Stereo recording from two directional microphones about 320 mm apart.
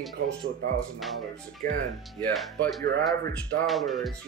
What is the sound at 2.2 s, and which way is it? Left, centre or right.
Speech, centre.